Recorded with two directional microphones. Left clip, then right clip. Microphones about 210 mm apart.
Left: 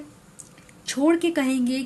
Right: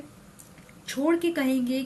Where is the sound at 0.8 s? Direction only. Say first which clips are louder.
Left 4 dB; 45° left (ahead or behind).